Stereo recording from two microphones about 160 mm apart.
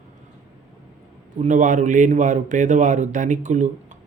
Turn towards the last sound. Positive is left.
turn(degrees=-50)  # may be behind; listen again after turning